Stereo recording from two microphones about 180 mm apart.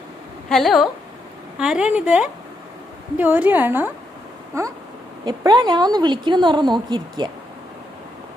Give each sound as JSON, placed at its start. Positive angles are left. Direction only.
{"t": 0.4, "sound": "a woman's voice", "side_deg": 0}